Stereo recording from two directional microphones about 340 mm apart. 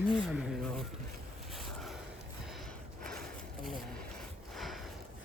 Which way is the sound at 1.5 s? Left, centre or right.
Centre.